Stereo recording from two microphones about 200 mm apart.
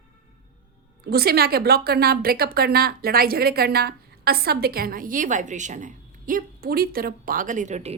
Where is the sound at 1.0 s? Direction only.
50° right (ahead or behind); by 7.9 s 35° right (ahead or behind).